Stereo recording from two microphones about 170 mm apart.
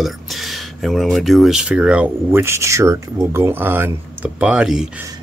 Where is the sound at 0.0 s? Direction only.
Centre (ahead or behind).